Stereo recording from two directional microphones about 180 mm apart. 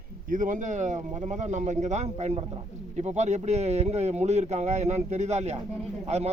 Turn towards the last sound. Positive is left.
turn(degrees=-35)  # may be behind; listen again after turning